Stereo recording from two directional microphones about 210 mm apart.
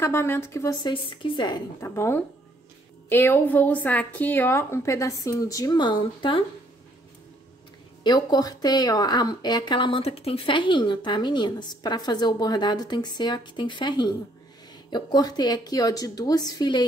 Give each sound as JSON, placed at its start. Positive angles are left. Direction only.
{"t": 0.0, "sound": "a woman's voice", "side_deg": 10}
{"t": 1.9, "sound": "a woman's voice", "side_deg": 10}
{"t": 8.0, "sound": "a woman's voice", "side_deg": 20}